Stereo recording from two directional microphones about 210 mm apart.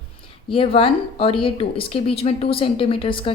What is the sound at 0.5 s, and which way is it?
A woman's voice, 25° left (ahead or behind).